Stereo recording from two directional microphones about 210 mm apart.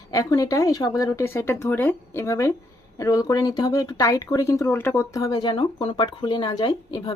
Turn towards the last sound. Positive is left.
turn(degrees=20)  # may be behind; listen again after turning